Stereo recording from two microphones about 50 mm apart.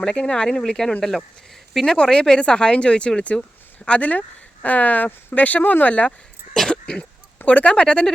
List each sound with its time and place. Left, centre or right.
0.0 s speech: centre
6.5 s a sound: centre
7.4 s speech: left